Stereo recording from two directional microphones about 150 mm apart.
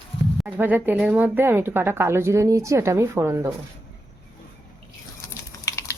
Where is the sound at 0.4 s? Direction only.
10° right (ahead or behind).